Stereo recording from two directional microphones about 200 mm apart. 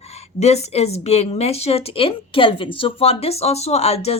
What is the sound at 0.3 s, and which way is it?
A woman's voice, 30° left (ahead or behind).